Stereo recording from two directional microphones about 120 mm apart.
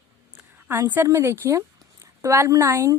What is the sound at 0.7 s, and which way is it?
A woman's voice, 20° right (ahead or behind).